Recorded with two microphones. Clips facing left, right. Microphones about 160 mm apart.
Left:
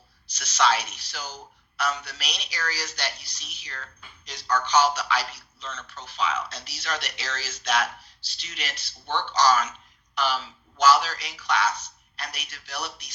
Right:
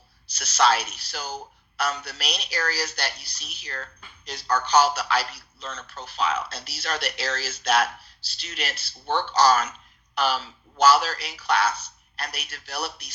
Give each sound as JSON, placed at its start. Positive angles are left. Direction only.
{"t": 0.3, "sound": "speech", "side_deg": -40}